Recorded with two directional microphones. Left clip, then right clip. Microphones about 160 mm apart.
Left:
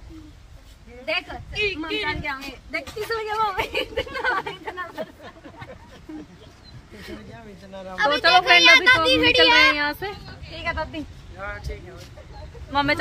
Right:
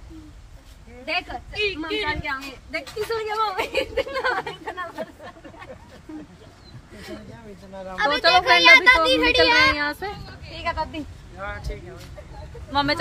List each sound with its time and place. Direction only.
1.0 s a woman's voice: 5° left (ahead or behind)
8.2 s speech: 20° left (ahead or behind)
8.5 s a child's voice: 25° right (ahead or behind)
9.5 s speech: 10° right (ahead or behind)
9.8 s speech: 20° left (ahead or behind)
11.3 s speech: 5° right (ahead or behind)